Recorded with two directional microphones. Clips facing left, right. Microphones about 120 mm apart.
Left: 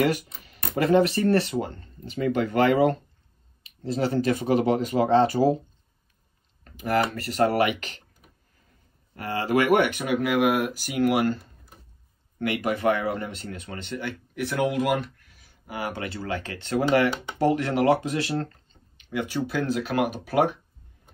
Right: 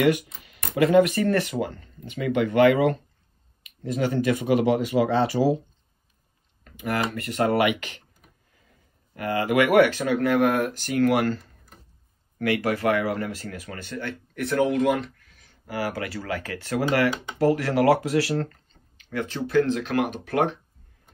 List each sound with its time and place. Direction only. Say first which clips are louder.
0.0 s speech: right 2 dB; 40° left (ahead or behind)
7.2 s speech: even; 35° left (ahead or behind)
9.1 s speech: right 1 dB; 30° left (ahead or behind)
14.3 s speech: right 3 dB; 5° left (ahead or behind)
15.6 s speech: right 3 dB; 20° left (ahead or behind)
18.9 s speech: left 1 dB; 10° left (ahead or behind)